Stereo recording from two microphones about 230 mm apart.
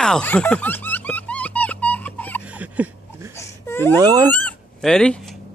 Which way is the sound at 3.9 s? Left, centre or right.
Centre.